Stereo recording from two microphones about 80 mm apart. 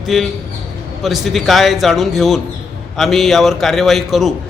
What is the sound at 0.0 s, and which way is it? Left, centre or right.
A man's voice, centre.